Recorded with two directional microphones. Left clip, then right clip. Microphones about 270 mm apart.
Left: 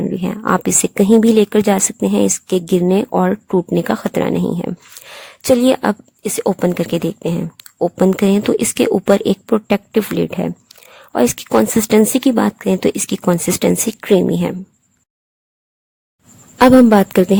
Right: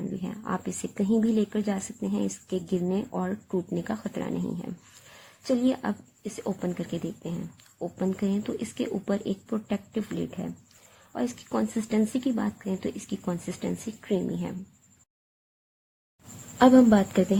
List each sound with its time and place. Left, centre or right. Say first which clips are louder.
0.0 s a woman's voice: left 16 dB; left
16.6 s a woman's voice: left 10 dB; left